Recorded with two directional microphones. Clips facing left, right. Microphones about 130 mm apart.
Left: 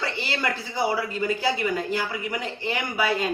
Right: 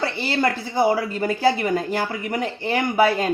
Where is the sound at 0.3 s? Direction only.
45° right (ahead or behind).